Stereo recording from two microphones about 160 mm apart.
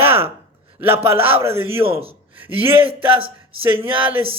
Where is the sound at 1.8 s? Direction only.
35° right (ahead or behind).